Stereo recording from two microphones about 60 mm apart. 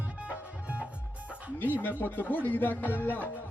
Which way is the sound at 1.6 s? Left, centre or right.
Left.